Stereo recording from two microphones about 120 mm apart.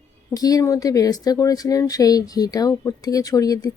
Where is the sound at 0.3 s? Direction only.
30° left (ahead or behind).